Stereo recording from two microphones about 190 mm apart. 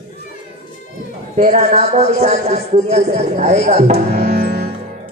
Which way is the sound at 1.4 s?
35° right (ahead or behind).